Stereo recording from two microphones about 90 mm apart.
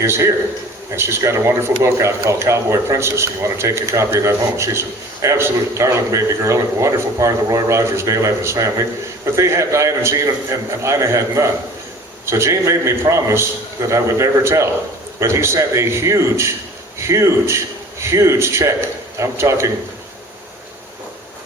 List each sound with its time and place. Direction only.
0.0 s a man's voice: 30° right (ahead or behind)